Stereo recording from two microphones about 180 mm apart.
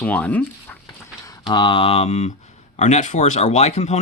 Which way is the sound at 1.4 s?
25° left (ahead or behind).